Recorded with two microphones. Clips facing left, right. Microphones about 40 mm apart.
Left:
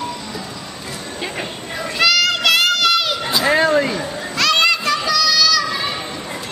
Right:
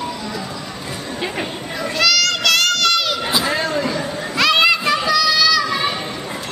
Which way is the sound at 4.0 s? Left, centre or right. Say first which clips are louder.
Right 2 dB; centre.